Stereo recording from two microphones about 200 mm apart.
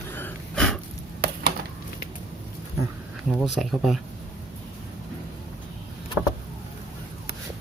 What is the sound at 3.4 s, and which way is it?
Speech, centre (ahead or behind).